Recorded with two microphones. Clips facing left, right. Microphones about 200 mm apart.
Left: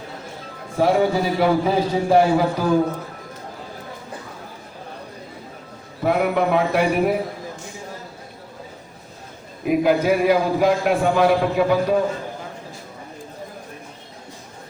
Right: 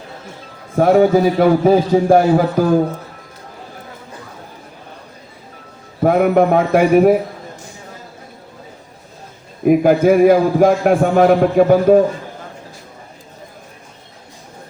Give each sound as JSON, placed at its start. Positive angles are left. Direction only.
{"t": 0.8, "sound": "a man's voice", "side_deg": -50}
{"t": 6.0, "sound": "a man's voice", "side_deg": -45}
{"t": 9.6, "sound": "a man's voice", "side_deg": -50}